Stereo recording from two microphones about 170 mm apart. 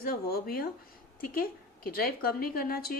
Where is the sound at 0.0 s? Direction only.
65° left (ahead or behind).